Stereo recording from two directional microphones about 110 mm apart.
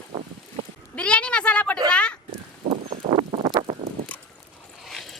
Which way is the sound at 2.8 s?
55° right (ahead or behind).